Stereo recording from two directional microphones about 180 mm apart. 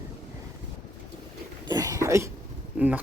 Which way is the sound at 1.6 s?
20° right (ahead or behind).